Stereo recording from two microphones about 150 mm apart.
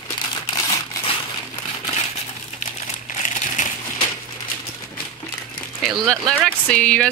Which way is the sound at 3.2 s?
65° left (ahead or behind).